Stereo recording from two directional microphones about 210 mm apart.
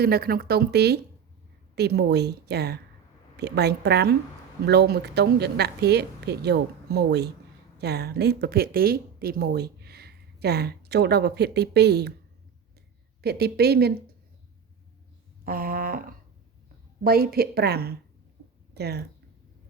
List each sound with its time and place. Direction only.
0.0 s a woman's voice: 45° right (ahead or behind)
13.2 s a woman's voice: 50° right (ahead or behind)
15.4 s a sound: 45° right (ahead or behind)
17.0 s a woman's voice: 45° right (ahead or behind)